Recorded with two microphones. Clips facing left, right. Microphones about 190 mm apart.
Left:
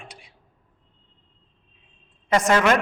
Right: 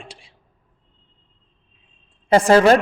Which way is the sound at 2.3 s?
30° right (ahead or behind).